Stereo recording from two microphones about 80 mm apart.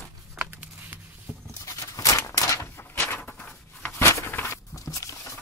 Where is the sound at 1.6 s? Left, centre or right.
Left; by 3.9 s centre.